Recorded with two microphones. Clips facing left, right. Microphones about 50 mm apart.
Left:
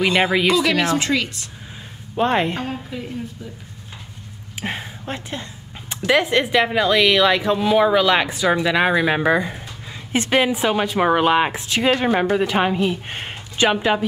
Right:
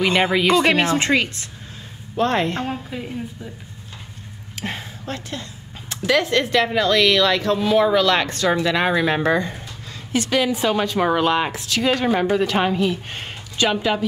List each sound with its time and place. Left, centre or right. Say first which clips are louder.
0.0 s speech: even; centre
0.7 s speech: right 1 dB; right
2.1 s speech: left 1 dB; centre
2.6 s a woman's voice: right 1 dB; centre
4.6 s speech: left 2 dB; centre
10.1 s a woman's voice: left 2 dB; left